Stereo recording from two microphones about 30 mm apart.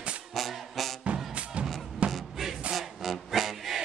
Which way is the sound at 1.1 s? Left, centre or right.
Right.